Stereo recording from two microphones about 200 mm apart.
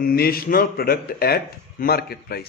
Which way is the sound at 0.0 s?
50° left (ahead or behind).